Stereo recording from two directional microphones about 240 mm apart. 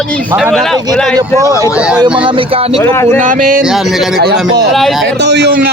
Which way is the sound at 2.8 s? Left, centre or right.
Centre.